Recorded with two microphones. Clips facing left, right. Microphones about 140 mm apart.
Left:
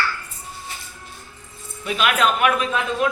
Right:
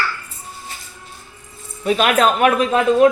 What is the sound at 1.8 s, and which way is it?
Speech, 40° right (ahead or behind).